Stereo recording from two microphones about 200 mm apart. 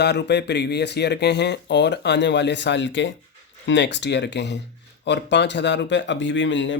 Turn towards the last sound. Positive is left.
turn(degrees=65)  # may be behind; listen again after turning